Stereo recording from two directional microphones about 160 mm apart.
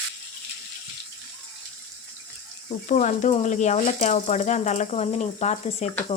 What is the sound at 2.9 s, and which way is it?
Speech, 50° left (ahead or behind).